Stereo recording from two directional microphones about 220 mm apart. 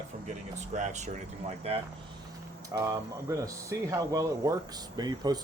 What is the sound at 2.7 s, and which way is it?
Speech, 15° right (ahead or behind).